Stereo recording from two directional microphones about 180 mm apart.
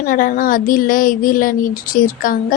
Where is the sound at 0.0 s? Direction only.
50° left (ahead or behind).